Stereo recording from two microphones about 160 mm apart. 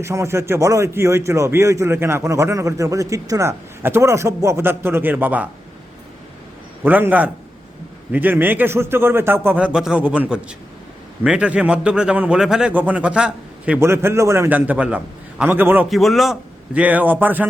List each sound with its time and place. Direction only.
0.0 s speech: 15° right (ahead or behind)
6.8 s speech: 10° right (ahead or behind)
15.9 s speech: centre (ahead or behind)